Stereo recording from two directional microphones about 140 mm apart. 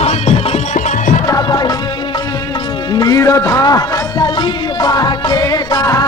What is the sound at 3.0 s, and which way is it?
Speech, 25° left (ahead or behind).